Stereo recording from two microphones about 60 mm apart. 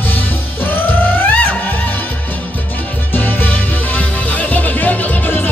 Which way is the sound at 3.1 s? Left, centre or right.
Left.